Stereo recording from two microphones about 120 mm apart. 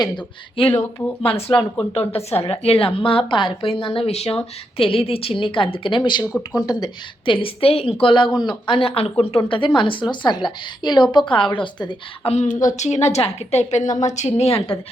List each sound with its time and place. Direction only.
0.7 s speech: 25° left (ahead or behind)
1.2 s speech: 50° left (ahead or behind)
1.5 s speech: 10° left (ahead or behind)
1.9 s speech: 55° left (ahead or behind)
6.3 s speech: 15° left (ahead or behind)
6.7 s a woman's voice: 35° left (ahead or behind)
7.3 s speech: 50° left (ahead or behind)
9.5 s a woman's voice: 40° left (ahead or behind)
12.3 s a woman's voice: 75° left (ahead or behind); by 14.8 s 60° left (ahead or behind)